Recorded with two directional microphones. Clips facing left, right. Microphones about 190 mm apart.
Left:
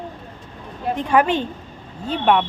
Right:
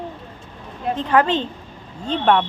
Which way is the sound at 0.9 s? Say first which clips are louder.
Even; 15° left (ahead or behind).